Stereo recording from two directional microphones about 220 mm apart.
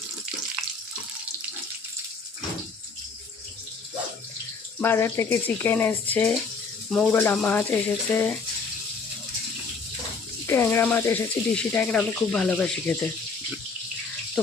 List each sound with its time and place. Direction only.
4.8 s speech: 10° left (ahead or behind)
10.4 s speech: 10° left (ahead or behind)